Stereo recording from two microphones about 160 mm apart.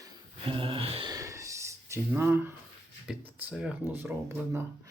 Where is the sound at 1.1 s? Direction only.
20° right (ahead or behind).